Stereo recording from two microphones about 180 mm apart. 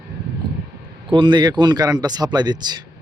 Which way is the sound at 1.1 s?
25° right (ahead or behind).